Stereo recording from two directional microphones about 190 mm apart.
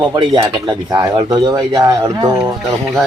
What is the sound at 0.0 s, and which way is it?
Speech, 25° right (ahead or behind).